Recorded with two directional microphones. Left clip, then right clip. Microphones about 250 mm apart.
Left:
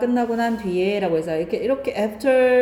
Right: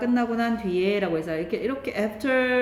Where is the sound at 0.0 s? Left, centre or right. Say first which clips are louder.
Left 4 dB; centre.